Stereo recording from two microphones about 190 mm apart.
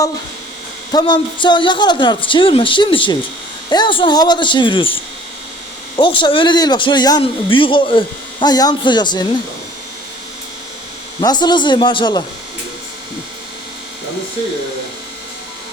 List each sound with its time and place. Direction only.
0.9 s a man's voice: 25° left (ahead or behind)
6.0 s a man's voice: 25° left (ahead or behind)
11.2 s a man's voice: 20° left (ahead or behind)